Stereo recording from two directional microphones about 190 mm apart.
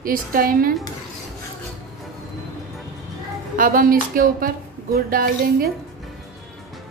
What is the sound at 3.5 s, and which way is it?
Speech, 45° right (ahead or behind).